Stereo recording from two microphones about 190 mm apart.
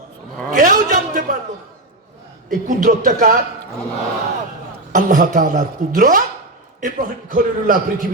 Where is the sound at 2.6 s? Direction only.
45° right (ahead or behind).